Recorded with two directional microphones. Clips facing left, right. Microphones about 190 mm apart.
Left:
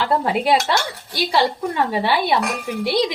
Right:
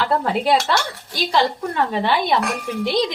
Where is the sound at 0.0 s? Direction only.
10° left (ahead or behind).